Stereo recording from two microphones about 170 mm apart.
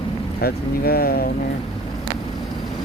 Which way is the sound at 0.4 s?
65° left (ahead or behind).